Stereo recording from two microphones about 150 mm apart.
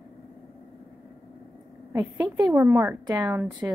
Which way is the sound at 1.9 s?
20° right (ahead or behind).